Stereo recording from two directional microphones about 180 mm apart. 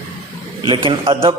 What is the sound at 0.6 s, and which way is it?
Speech, 30° right (ahead or behind).